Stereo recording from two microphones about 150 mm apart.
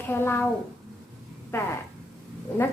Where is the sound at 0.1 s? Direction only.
15° left (ahead or behind).